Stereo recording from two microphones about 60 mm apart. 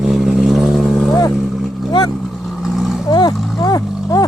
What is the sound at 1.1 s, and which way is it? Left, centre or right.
Speech, left.